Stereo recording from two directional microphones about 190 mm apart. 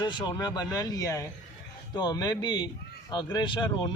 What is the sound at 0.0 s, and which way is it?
Speech, 20° left (ahead or behind).